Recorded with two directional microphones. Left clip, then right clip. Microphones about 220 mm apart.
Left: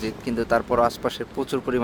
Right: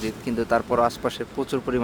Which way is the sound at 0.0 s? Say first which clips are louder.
Even; 5° left (ahead or behind).